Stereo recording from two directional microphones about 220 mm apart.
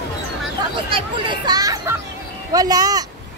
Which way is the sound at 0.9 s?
20° right (ahead or behind).